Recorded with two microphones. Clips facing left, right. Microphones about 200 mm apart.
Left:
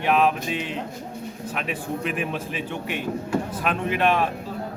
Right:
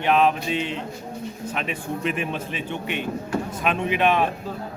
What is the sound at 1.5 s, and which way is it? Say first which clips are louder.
Speech: left 1 dB; 5° left (ahead or behind).